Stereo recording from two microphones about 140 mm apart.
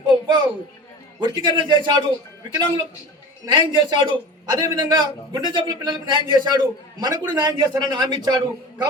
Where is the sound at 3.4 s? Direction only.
30° right (ahead or behind).